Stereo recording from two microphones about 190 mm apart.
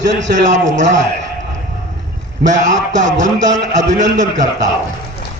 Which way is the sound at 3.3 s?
75° right (ahead or behind).